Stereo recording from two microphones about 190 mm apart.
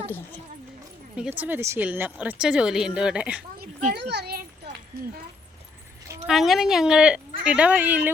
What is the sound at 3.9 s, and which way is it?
A child's voice, 60° right (ahead or behind).